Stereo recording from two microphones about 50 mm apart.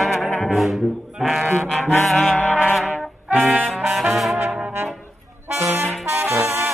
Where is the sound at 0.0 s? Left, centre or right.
Centre.